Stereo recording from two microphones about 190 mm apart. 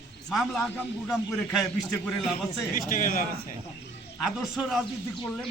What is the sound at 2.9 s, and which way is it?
Speech, 45° left (ahead or behind).